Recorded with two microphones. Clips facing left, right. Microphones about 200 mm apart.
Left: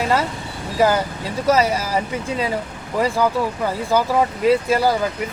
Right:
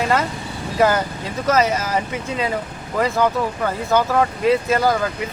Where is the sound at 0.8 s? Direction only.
10° left (ahead or behind).